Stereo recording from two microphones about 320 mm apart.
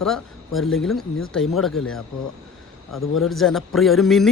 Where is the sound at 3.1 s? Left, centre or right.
Centre.